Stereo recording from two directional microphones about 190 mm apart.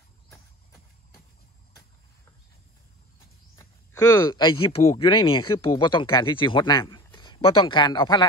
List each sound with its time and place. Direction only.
3.5 s a man's voice: 20° left (ahead or behind)